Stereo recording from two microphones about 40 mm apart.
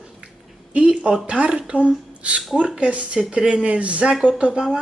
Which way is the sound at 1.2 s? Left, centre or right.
Right.